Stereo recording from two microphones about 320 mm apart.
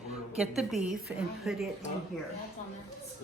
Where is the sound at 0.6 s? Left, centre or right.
Centre.